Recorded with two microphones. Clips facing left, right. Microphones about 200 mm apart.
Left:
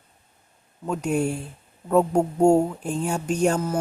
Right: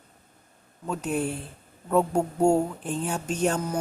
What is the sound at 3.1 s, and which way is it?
Speech, 10° left (ahead or behind).